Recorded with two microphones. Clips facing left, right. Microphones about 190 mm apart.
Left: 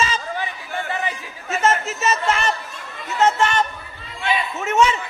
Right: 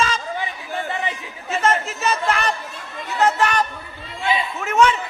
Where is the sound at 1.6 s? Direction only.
Centre (ahead or behind).